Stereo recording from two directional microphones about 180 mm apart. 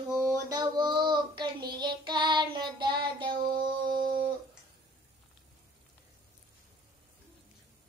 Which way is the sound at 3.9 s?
55° right (ahead or behind).